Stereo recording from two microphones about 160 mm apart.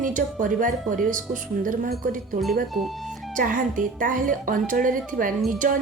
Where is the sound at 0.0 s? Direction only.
55° right (ahead or behind).